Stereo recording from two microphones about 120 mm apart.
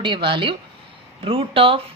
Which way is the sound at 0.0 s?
45° right (ahead or behind).